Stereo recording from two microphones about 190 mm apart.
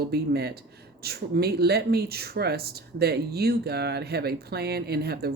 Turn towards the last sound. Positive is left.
turn(degrees=-55)  # may be behind; listen again after turning